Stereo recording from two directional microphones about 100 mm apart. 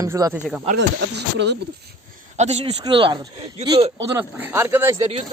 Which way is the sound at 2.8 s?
50° right (ahead or behind).